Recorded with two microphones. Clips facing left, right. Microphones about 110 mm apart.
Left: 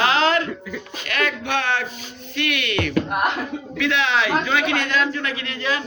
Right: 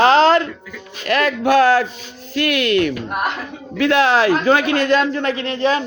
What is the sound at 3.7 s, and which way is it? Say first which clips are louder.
A man's voice: right 7 dB; 45° right (ahead or behind).